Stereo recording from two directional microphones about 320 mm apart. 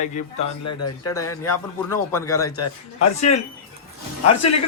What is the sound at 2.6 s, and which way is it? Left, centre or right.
Speech, left.